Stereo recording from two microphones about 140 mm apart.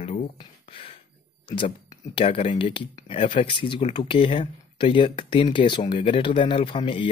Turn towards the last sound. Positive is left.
turn(degrees=40)  # may be behind; listen again after turning